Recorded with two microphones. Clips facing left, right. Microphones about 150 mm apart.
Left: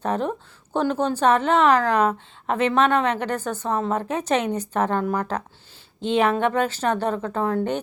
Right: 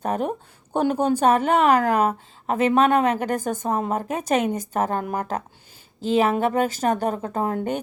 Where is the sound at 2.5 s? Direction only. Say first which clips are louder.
Right 1 dB; 40° right (ahead or behind).